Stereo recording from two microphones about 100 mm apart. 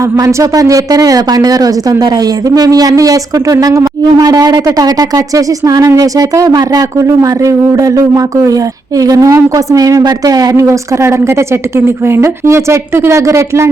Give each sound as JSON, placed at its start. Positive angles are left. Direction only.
{"t": 0.2, "sound": "speech", "side_deg": -35}